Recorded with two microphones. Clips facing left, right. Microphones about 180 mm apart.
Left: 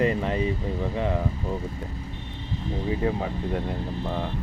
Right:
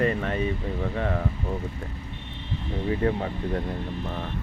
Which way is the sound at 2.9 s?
10° left (ahead or behind).